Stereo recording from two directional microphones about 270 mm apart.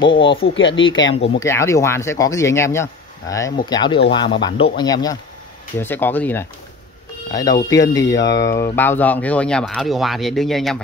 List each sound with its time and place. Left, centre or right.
0.0 s speech: centre
0.4 s speech: left
1.4 s speech: centre